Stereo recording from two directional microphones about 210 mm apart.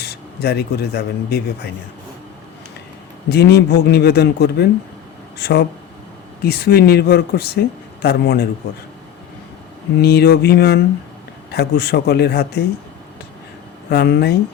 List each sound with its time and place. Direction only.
0.0 s speech: 50° left (ahead or behind)
3.2 s a man's voice: 50° left (ahead or behind)
10.0 s a man's voice: 50° left (ahead or behind)
13.9 s a man's voice: 50° left (ahead or behind)